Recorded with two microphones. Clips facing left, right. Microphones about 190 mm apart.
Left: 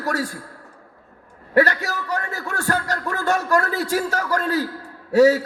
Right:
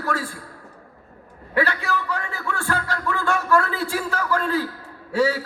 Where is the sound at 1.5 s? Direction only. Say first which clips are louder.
Left 4 dB; 40° left (ahead or behind).